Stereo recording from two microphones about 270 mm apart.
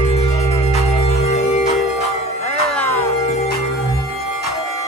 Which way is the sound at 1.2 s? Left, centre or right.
Left.